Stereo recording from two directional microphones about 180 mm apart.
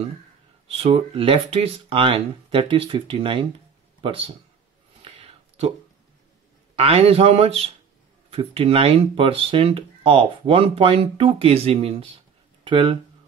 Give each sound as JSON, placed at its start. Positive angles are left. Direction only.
{"t": 0.7, "sound": "speech", "side_deg": -35}
{"t": 5.0, "sound": "a sound", "side_deg": -30}
{"t": 6.7, "sound": "speech", "side_deg": -35}